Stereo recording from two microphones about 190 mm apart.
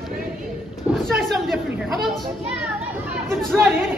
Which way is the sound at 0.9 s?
Centre (ahead or behind).